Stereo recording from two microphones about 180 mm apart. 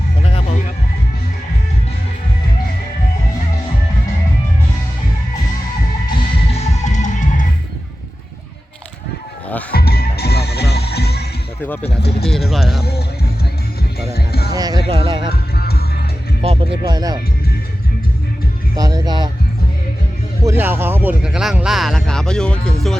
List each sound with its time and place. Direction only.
6.5 s music: 40° left (ahead or behind)
9.7 s music: 60° left (ahead or behind)
12.5 s speech: centre (ahead or behind)
12.8 s music: 60° left (ahead or behind)
14.5 s music: 20° right (ahead or behind)
15.3 s music: 60° left (ahead or behind)
16.4 s music: 30° right (ahead or behind)
18.8 s speech: 20° right (ahead or behind)
20.4 s speech: 15° right (ahead or behind); by 23.0 s 5° left (ahead or behind)